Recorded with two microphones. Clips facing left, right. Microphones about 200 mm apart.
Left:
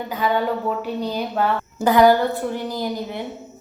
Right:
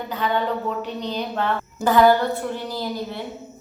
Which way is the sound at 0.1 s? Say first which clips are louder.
Left 2 dB; 10° left (ahead or behind).